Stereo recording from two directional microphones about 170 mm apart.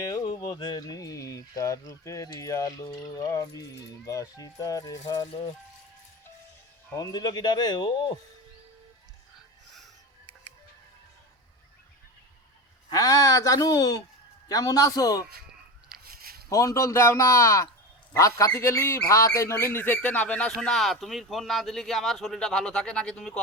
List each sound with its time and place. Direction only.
0.0 s speech: 20° left (ahead or behind)
6.9 s speech: 20° left (ahead or behind)
12.9 s speech: 20° left (ahead or behind)
16.0 s a sound: 60° right (ahead or behind)
16.5 s speech: 20° left (ahead or behind)